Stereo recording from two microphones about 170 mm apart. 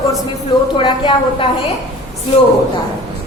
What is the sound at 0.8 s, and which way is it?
Speech, 30° left (ahead or behind).